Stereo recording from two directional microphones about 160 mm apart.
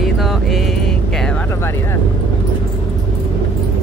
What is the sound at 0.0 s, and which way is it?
Vehicle, centre (ahead or behind).